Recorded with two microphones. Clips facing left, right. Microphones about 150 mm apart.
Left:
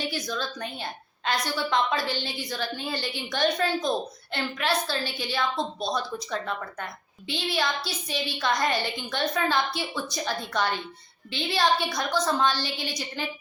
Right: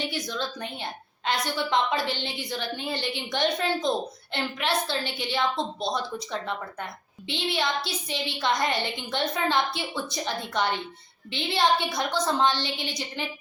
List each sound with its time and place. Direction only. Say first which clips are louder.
0.1 s a woman's voice: even; 20° right (ahead or behind)